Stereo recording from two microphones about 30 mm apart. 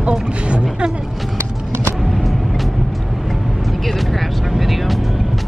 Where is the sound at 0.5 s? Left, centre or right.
Right.